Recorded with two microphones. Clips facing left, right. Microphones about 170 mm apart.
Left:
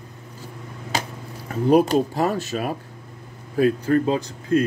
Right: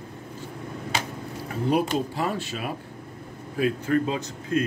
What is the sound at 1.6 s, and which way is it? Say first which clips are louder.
Speech: left 7 dB; 45° left (ahead or behind).